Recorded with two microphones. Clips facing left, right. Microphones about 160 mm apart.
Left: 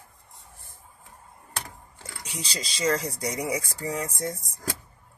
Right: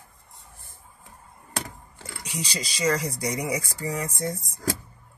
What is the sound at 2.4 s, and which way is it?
Speech, 30° left (ahead or behind).